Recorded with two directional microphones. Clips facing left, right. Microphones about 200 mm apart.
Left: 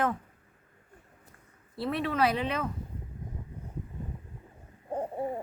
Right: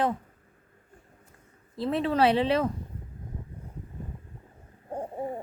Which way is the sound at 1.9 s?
30° right (ahead or behind).